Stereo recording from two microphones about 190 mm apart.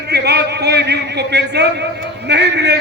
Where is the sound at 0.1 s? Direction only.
60° right (ahead or behind).